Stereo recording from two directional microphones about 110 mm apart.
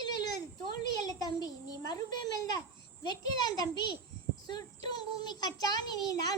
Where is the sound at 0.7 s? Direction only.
35° left (ahead or behind).